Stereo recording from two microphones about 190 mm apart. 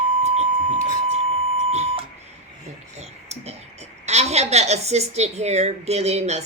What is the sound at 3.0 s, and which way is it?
A woman's voice, 35° right (ahead or behind).